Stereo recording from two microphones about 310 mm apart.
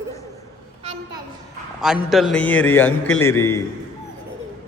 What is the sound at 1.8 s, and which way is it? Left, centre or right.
A man's voice, centre.